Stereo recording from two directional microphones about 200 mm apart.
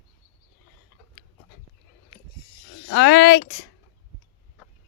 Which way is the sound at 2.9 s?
60° left (ahead or behind).